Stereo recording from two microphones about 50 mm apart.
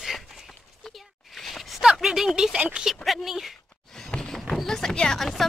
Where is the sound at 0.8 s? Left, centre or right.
Centre.